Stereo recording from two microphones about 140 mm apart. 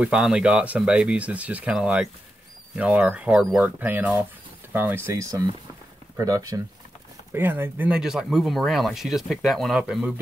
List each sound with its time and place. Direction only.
0.0 s speech: 5° right (ahead or behind); by 6.6 s 25° right (ahead or behind)
7.3 s speech: 15° right (ahead or behind)